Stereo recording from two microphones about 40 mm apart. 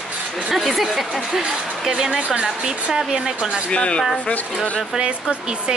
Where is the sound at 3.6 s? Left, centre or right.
Left.